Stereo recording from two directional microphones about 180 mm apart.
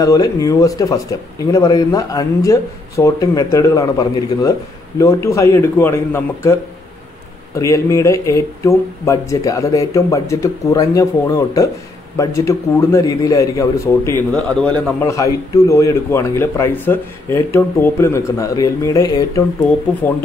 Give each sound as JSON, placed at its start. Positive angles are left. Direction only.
{"t": 0.0, "sound": "speech", "side_deg": 20}
{"t": 15.0, "sound": "speech", "side_deg": 15}